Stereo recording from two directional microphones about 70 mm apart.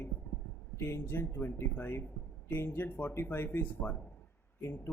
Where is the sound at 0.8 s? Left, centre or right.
Left.